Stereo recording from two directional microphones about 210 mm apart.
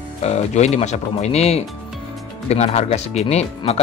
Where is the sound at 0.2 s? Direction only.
30° left (ahead or behind).